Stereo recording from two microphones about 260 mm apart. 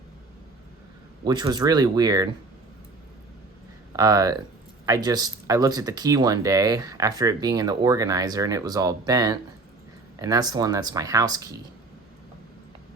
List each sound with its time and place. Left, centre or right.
1.2 s speech: centre
3.9 s speech: centre